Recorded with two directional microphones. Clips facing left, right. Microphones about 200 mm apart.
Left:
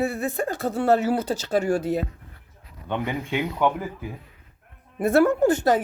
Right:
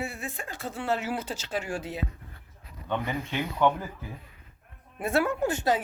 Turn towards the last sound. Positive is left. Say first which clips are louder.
# left 7 dB
turn(degrees=45)  # may be behind; listen again after turning